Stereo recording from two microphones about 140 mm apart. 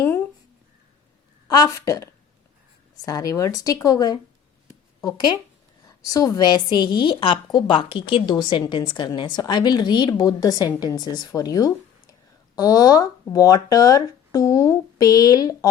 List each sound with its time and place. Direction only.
1.5 s speech: 25° left (ahead or behind)
5.8 s a woman's voice: 25° left (ahead or behind)